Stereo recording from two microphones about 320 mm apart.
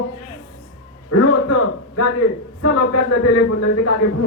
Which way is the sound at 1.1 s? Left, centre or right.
Left.